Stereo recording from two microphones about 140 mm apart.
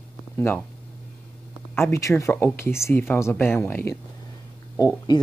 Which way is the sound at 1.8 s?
20° left (ahead or behind).